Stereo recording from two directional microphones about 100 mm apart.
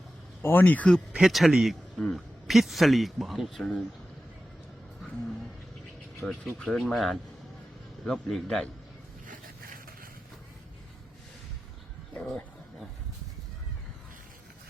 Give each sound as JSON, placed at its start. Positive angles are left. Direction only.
{"t": 0.4, "sound": "speech", "side_deg": 20}
{"t": 1.1, "sound": "speech", "side_deg": -5}
{"t": 6.1, "sound": "speech", "side_deg": 0}